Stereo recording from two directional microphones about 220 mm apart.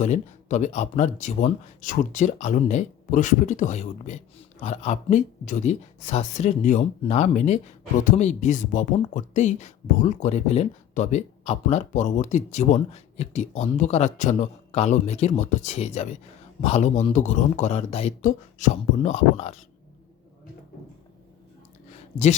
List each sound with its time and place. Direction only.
0.0 s speech: 35° left (ahead or behind)